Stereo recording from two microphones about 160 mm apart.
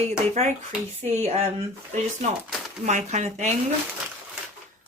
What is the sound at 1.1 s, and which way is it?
Speech, 40° right (ahead or behind).